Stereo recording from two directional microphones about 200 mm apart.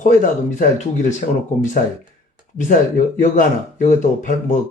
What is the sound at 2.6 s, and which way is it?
Speech, 40° left (ahead or behind).